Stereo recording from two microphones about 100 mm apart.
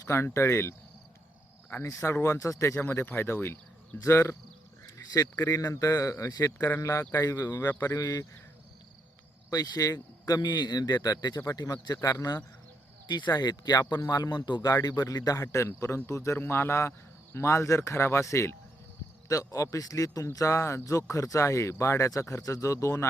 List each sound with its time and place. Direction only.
0.0 s speech: 25° left (ahead or behind)
7.7 s speech: 20° left (ahead or behind)
7.9 s speech: 30° left (ahead or behind)
9.5 s speech: 40° left (ahead or behind)
14.7 s speech: 35° left (ahead or behind)